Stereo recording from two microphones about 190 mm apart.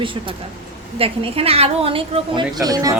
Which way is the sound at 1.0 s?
30° right (ahead or behind).